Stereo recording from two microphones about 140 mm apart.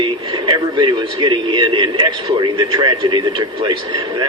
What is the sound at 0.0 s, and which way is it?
A man's voice, 35° right (ahead or behind).